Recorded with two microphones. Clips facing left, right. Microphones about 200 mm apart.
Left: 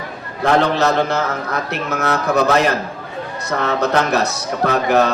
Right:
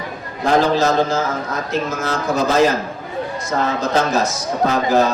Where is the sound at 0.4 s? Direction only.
65° left (ahead or behind).